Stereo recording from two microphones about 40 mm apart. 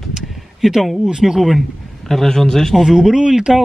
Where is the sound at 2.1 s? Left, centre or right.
Centre.